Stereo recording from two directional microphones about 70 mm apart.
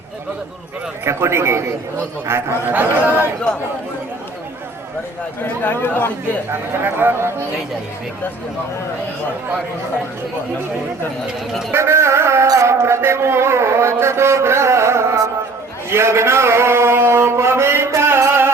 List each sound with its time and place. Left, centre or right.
1.0 s speech: right
5.4 s speech: left
6.5 s speech: right
11.7 s music: right
12.5 s a man's voice: right
15.9 s a sound: right